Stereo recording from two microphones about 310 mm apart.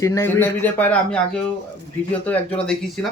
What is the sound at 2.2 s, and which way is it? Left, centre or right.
Speech, centre.